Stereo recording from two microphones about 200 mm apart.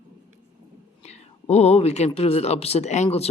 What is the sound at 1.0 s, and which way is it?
Speech, 30° left (ahead or behind).